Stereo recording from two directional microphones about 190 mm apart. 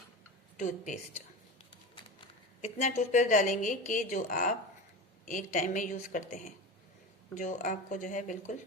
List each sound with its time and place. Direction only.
0.6 s a woman's voice: 40° left (ahead or behind)
2.6 s a woman's voice: 35° left (ahead or behind)